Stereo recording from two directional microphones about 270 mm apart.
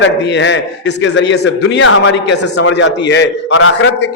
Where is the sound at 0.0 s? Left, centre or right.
Left.